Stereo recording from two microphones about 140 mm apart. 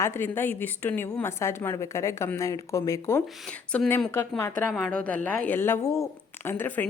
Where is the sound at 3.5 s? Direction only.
10° left (ahead or behind).